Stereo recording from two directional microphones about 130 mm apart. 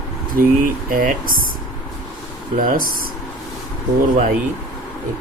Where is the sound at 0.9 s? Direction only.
90° right.